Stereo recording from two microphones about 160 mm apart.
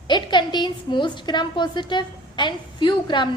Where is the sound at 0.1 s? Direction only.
30° left (ahead or behind).